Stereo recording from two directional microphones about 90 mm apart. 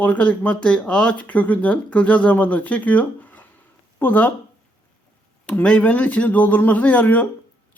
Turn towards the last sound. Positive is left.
turn(degrees=15)  # may be behind; listen again after turning